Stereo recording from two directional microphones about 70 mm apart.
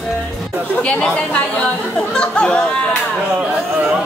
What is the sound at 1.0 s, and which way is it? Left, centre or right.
Speech, centre.